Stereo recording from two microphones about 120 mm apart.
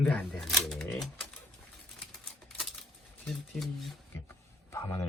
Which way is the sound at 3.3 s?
Centre (ahead or behind).